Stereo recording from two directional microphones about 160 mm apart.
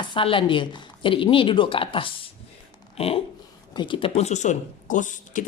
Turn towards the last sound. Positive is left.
turn(degrees=50)  # may be behind; listen again after turning